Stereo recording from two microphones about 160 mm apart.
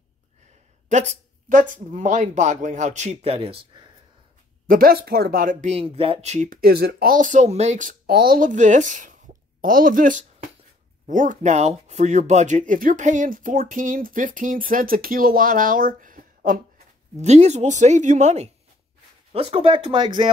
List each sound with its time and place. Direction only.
0.8 s speech: 50° right (ahead or behind); by 3.9 s 30° right (ahead or behind)
4.6 s speech: 65° right (ahead or behind); by 6.6 s 50° right (ahead or behind)
6.6 s speech: 75° right (ahead or behind)
17.2 s speech: 45° right (ahead or behind)
19.3 s speech: 35° right (ahead or behind)